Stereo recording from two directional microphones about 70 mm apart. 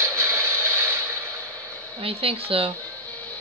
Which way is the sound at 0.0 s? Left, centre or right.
Right.